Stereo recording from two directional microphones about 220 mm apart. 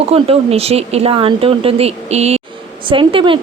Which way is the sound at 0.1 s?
25° right (ahead or behind).